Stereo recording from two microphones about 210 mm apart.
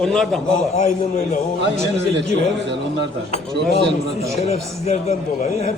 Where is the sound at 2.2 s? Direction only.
55° right (ahead or behind).